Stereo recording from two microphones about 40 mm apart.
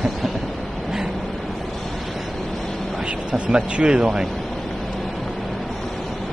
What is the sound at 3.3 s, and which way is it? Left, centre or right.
Speech, right.